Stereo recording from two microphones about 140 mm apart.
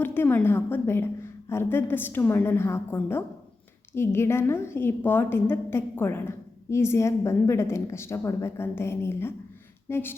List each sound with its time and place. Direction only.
0.0 s a woman's voice: 15° left (ahead or behind)